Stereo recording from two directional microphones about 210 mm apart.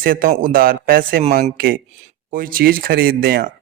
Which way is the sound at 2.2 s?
40° right (ahead or behind).